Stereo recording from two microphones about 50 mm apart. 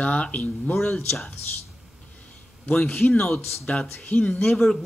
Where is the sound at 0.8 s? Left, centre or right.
Centre.